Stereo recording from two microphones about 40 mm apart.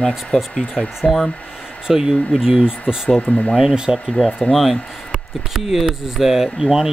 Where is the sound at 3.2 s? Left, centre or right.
Left.